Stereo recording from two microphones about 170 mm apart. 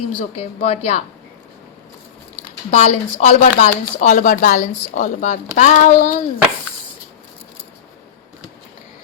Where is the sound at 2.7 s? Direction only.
40° left (ahead or behind).